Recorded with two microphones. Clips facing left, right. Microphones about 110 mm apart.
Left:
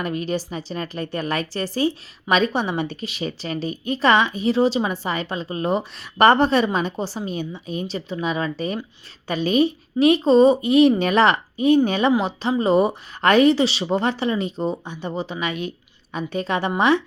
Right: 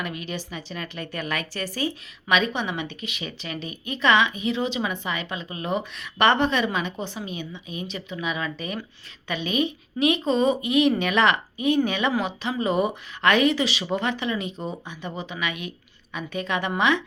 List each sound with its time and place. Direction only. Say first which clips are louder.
0.0 s a woman's voice: left 7 dB; 35° left (ahead or behind)